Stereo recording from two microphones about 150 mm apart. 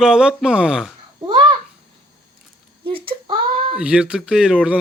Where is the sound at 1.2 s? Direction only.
30° right (ahead or behind).